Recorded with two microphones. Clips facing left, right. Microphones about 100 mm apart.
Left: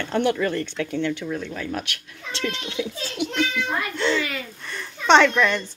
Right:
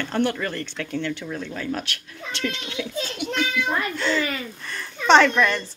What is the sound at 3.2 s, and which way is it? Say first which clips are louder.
Speech: left 2 dB; 25° left (ahead or behind).